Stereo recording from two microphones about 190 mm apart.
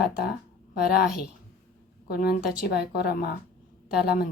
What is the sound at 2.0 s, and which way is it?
A woman's voice, 55° left (ahead or behind).